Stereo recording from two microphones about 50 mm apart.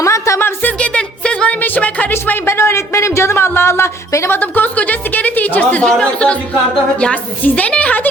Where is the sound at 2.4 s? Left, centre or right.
Left.